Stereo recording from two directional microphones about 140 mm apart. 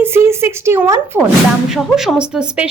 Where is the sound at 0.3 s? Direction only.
20° right (ahead or behind).